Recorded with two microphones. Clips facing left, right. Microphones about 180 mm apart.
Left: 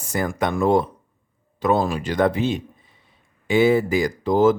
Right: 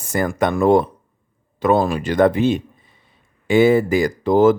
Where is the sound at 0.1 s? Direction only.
55° right (ahead or behind).